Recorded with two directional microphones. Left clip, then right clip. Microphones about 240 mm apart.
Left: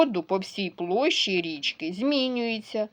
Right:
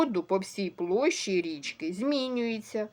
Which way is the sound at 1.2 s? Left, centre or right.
Left.